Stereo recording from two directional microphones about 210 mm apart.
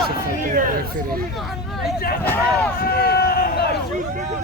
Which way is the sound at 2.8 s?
45° left (ahead or behind).